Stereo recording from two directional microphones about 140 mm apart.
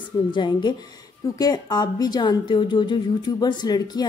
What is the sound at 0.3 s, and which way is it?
A woman's voice, 35° left (ahead or behind).